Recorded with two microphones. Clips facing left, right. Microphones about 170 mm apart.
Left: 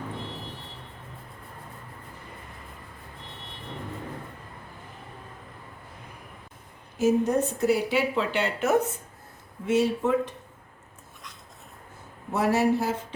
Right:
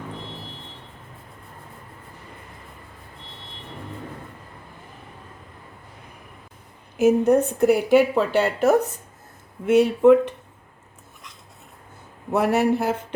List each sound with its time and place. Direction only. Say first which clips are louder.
7.0 s a woman's voice: right 6 dB; 60° right (ahead or behind); by 8.8 s 35° right (ahead or behind)
9.6 s speech: right 9 dB; 60° right (ahead or behind)
12.3 s speech: right 3 dB; 60° right (ahead or behind)